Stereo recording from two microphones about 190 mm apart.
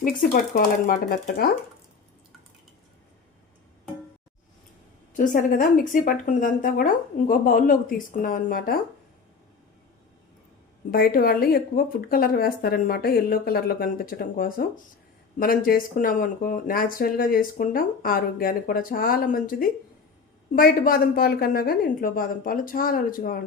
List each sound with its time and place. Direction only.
0.5 s speech: 50° left (ahead or behind)
5.1 s speech: 45° left (ahead or behind)
10.9 s speech: 50° left (ahead or behind)